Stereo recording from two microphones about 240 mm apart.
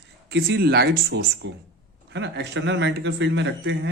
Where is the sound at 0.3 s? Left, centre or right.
Right.